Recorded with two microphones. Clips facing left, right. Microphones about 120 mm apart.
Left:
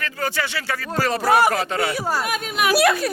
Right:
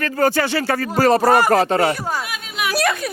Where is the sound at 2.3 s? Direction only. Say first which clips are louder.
Left 4 dB; 45° left (ahead or behind).